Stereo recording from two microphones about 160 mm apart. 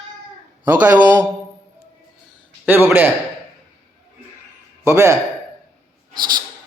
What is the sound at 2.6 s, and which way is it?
Speech, 15° right (ahead or behind).